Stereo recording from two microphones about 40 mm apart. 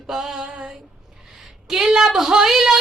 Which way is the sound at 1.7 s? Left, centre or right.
Centre.